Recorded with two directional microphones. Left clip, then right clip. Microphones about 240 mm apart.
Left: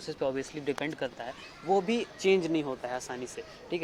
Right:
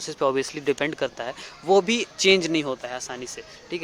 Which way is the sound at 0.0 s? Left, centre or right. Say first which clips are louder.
Right 9 dB; right.